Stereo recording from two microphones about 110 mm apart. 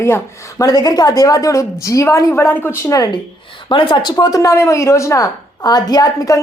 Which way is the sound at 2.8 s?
35° left (ahead or behind).